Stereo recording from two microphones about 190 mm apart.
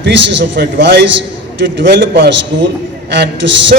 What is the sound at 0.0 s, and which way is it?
A man's voice, 70° right (ahead or behind).